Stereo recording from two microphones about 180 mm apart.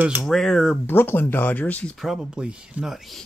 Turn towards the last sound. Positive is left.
turn(degrees=0)  # may be behind; listen again after turning